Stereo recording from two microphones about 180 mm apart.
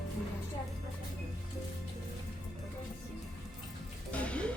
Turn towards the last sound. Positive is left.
turn(degrees=5)  # may be behind; listen again after turning